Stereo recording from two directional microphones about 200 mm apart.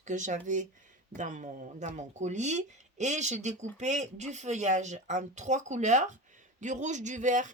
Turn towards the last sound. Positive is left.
turn(degrees=-40)  # may be behind; listen again after turning